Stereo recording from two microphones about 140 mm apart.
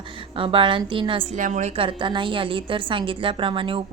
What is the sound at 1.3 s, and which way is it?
Speech, 60° right (ahead or behind).